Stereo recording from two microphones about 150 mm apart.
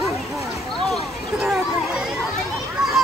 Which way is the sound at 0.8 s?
Centre (ahead or behind).